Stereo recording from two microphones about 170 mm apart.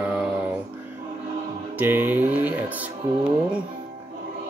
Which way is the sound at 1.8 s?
10° right (ahead or behind).